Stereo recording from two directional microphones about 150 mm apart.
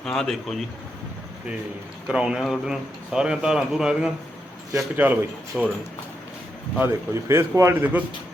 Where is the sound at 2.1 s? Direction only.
5° right (ahead or behind).